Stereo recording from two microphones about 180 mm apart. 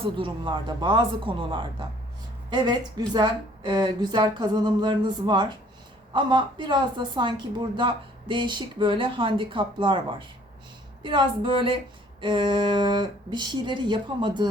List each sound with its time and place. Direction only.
0.0 s a woman's voice: 25° right (ahead or behind)
3.1 s a woman's voice: 25° right (ahead or behind)